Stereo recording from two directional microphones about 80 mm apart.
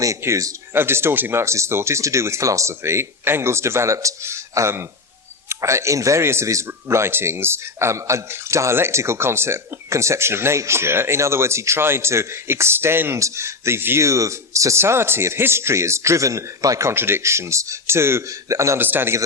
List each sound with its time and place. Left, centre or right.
0.2 s a man's voice: right
0.7 s a man's voice: right
16.9 s a man's voice: right
18.8 s speech: right